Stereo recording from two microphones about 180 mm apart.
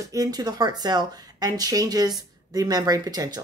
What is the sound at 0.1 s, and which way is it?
Speech, 20° right (ahead or behind).